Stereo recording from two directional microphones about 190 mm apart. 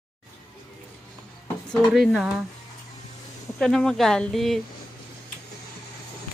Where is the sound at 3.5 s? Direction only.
5° left (ahead or behind).